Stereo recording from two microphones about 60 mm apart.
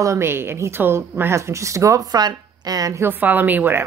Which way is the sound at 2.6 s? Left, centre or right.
Right.